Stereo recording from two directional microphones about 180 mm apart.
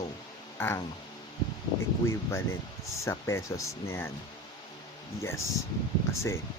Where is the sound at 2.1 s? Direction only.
15° left (ahead or behind).